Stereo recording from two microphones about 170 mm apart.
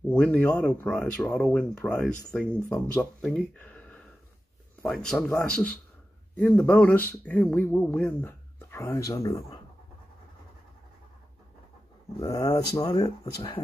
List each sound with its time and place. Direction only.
0.1 s speech: 5° left (ahead or behind)
12.2 s speech: 20° left (ahead or behind)